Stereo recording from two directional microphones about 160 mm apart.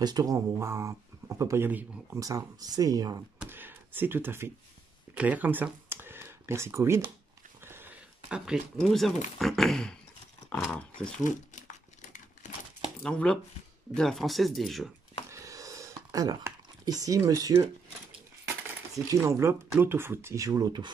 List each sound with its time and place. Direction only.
0.0 s speech: 25° right (ahead or behind)
2.2 s speech: 20° right (ahead or behind)
3.3 s a sound: 10° right (ahead or behind)
5.1 s speech: 10° right (ahead or behind)
11.2 s crumpling: 50° left (ahead or behind)
13.0 s speech: 5° left (ahead or behind)
15.2 s a sound: 20° right (ahead or behind)
19.0 s speech: 15° right (ahead or behind)